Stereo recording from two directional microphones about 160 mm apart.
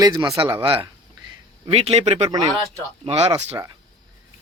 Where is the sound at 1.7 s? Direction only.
40° right (ahead or behind).